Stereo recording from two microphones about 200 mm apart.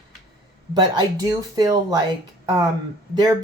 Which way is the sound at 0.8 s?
20° right (ahead or behind).